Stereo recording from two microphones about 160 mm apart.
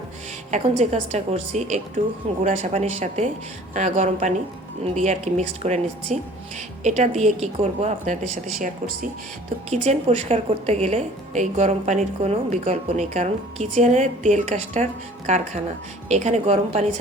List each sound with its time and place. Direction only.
0.5 s a woman's voice: 45° right (ahead or behind)
9.6 s a woman's voice: 45° right (ahead or behind)
16.0 s a woman's voice: 45° right (ahead or behind)